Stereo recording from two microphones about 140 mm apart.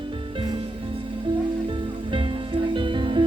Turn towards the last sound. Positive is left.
turn(degrees=-35)  # may be behind; listen again after turning